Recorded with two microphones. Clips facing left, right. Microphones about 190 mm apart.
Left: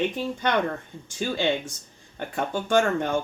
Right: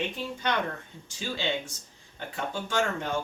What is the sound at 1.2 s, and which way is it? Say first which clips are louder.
Speech: left 7 dB; 55° left (ahead or behind).